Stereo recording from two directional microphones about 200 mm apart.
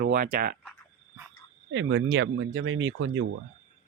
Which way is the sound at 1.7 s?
70° right (ahead or behind).